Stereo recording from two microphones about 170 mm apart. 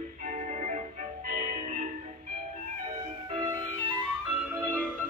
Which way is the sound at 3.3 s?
25° right (ahead or behind).